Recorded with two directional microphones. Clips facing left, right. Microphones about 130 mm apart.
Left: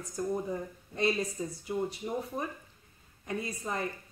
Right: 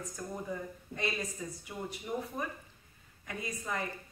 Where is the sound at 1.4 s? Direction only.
25° left (ahead or behind).